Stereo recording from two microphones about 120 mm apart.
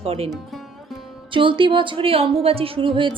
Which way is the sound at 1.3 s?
45° right (ahead or behind).